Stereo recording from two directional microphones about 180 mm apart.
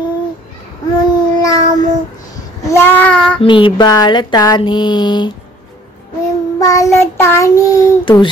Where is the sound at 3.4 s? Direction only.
30° left (ahead or behind).